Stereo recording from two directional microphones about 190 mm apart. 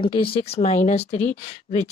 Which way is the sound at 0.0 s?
25° left (ahead or behind).